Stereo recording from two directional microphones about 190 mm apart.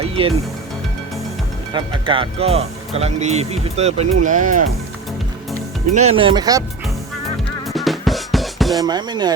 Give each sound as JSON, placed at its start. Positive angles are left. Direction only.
{"t": 0.0, "sound": "music", "side_deg": -30}
{"t": 1.7, "sound": "speech", "side_deg": -25}
{"t": 5.9, "sound": "speech", "side_deg": -35}
{"t": 7.7, "sound": "music", "side_deg": 0}
{"t": 8.8, "sound": "speech", "side_deg": -20}